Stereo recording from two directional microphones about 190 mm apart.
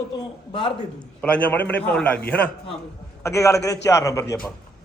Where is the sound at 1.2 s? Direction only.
5° left (ahead or behind).